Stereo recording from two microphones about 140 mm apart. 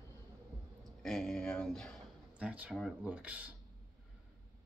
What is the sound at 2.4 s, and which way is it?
Speech, 10° right (ahead or behind).